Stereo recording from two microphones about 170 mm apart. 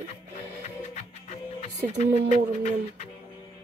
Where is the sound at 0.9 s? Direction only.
40° left (ahead or behind).